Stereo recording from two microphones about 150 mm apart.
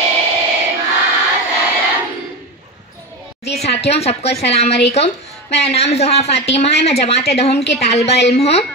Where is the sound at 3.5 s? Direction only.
45° left (ahead or behind).